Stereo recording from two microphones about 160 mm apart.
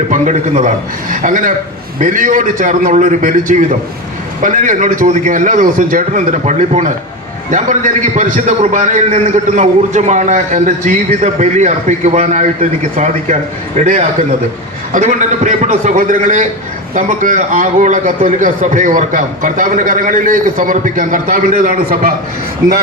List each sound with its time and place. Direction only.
0.1 s a man's voice: 55° right (ahead or behind)
13.8 s a man's voice: 50° right (ahead or behind)